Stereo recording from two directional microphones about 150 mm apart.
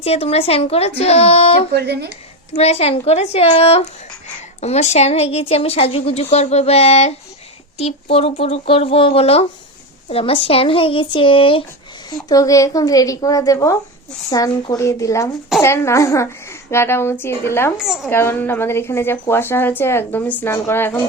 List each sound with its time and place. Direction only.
0.0 s speech: 45° left (ahead or behind)
1.7 s speech: 90° right
2.6 s speech: 45° left (ahead or behind)
12.3 s a woman's voice: 20° left (ahead or behind)
17.7 s a woman's voice: 5° right (ahead or behind)
18.1 s speech: 15° left (ahead or behind)